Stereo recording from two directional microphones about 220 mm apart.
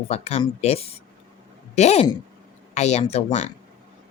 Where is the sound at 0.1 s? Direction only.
30° left (ahead or behind).